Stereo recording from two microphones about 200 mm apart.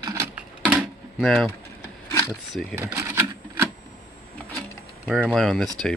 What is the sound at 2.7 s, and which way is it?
Typewriter, 10° right (ahead or behind).